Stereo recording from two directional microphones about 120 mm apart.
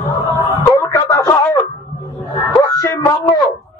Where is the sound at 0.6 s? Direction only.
25° left (ahead or behind).